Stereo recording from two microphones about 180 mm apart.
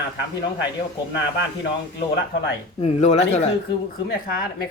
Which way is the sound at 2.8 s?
35° left (ahead or behind).